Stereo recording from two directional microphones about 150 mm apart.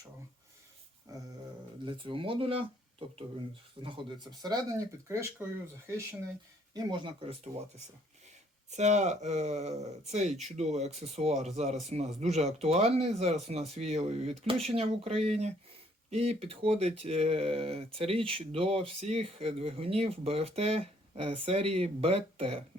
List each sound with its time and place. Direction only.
1.8 s speech: 35° right (ahead or behind)
3.8 s speech: 30° right (ahead or behind)
5.4 s speech: 15° right (ahead or behind)
6.7 s speech: 30° right (ahead or behind)
8.7 s speech: 50° right (ahead or behind)